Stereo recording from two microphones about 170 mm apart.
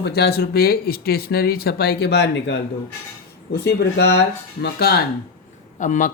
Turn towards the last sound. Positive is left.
turn(degrees=50)  # may be behind; listen again after turning